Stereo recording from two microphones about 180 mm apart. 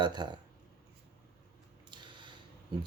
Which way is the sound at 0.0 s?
25° right (ahead or behind).